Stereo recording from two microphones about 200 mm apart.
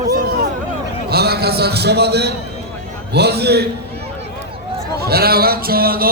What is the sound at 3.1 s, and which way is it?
Speech, 55° right (ahead or behind).